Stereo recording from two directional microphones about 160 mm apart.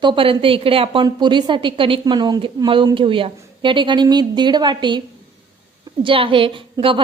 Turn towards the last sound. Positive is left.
turn(degrees=-30)  # may be behind; listen again after turning